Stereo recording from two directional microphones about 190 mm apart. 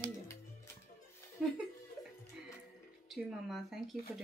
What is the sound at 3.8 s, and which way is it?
Speech, 20° left (ahead or behind).